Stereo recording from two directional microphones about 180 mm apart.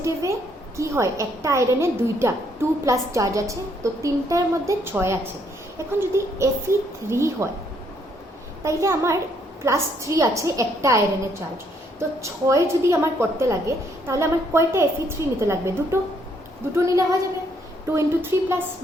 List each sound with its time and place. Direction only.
0.0 s a woman's voice: 15° right (ahead or behind)
8.6 s a woman's voice: 15° right (ahead or behind)